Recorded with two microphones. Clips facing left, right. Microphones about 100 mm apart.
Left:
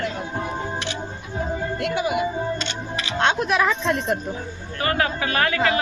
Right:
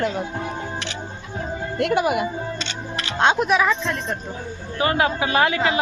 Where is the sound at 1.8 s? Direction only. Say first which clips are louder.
Right 5 dB; 55° right (ahead or behind).